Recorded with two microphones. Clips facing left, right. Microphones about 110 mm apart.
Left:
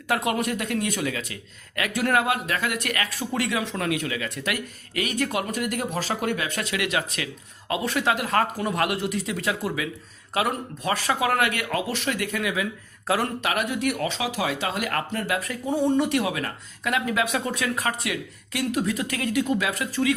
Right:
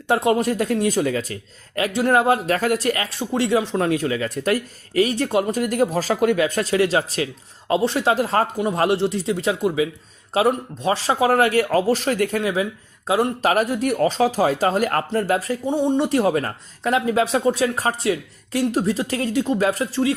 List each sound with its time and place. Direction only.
0.1 s a man's voice: 30° right (ahead or behind)
13.1 s speech: 20° right (ahead or behind)
13.4 s a man's voice: 40° right (ahead or behind); by 16.0 s 20° right (ahead or behind)
16.0 s a man's voice: 35° right (ahead or behind)